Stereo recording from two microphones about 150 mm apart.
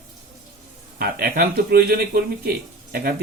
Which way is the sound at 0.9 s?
90° right.